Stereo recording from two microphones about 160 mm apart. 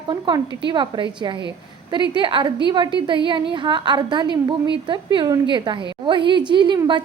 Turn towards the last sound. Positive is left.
turn(degrees=-30)  # may be behind; listen again after turning